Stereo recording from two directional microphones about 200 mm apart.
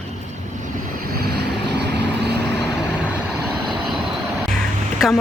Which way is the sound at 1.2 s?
55° right (ahead or behind).